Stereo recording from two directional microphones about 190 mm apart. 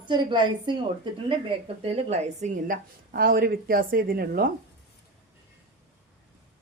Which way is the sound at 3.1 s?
50° right (ahead or behind).